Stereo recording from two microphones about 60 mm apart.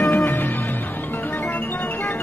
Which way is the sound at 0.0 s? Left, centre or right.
Left.